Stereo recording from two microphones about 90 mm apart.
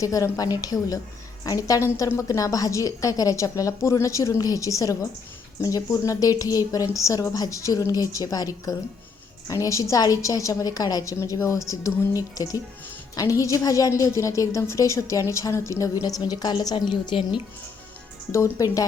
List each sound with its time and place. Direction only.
0.0 s a woman's voice: 40° left (ahead or behind)
13.1 s a woman's voice: 40° left (ahead or behind)
16.0 s a woman's voice: 45° left (ahead or behind); by 17.4 s 60° left (ahead or behind)
18.5 s a woman's voice: 40° left (ahead or behind)